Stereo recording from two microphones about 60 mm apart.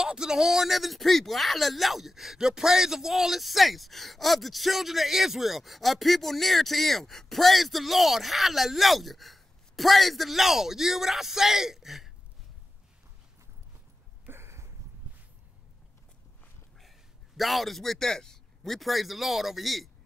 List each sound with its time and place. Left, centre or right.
0.0 s speech: centre
14.2 s a sound: right
17.4 s speech: centre